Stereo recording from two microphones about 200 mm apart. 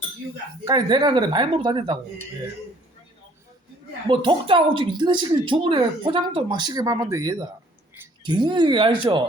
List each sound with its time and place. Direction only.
0.6 s speech: 20° right (ahead or behind)
4.1 s speech: 25° right (ahead or behind)